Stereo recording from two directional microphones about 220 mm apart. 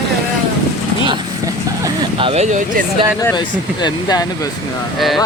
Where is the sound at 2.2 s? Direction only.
30° right (ahead or behind).